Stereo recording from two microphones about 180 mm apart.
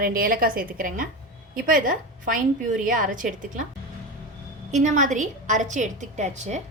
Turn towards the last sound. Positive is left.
turn(degrees=-40)  # may be behind; listen again after turning